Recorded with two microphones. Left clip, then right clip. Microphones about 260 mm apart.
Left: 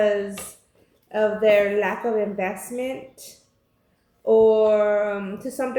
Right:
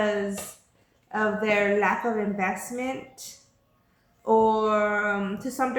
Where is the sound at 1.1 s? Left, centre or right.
Centre.